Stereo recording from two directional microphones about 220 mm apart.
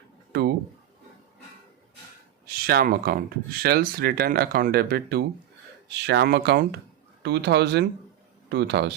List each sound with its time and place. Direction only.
2.6 s speech: 40° right (ahead or behind)